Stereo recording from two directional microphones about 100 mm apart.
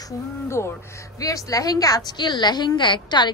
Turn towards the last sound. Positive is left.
turn(degrees=50)  # may be behind; listen again after turning